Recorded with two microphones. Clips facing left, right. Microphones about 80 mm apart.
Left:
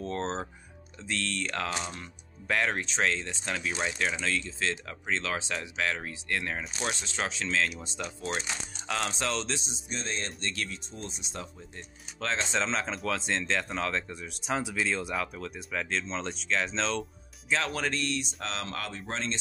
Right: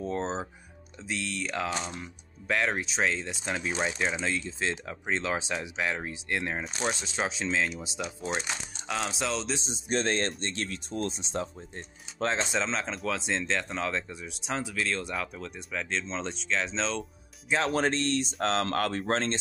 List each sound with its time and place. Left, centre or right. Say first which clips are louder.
0.0 s speech: right 1 dB; centre
9.7 s speech: right 8 dB; right
10.4 s speech: right 1 dB; right
10.7 s speech: right 8 dB; right
11.1 s speech: right 7 dB; right
12.5 s speech: even; centre
14.6 s speech: left 1 dB; centre
17.6 s speech: right 5 dB; right